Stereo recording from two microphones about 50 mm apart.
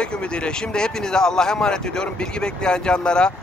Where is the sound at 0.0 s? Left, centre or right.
Centre.